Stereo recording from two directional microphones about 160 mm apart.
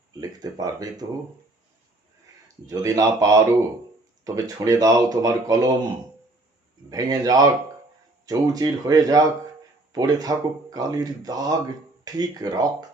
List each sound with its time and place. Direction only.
0.2 s speech: 25° right (ahead or behind)
2.6 s speech: 20° right (ahead or behind)
6.9 s speech: 25° right (ahead or behind)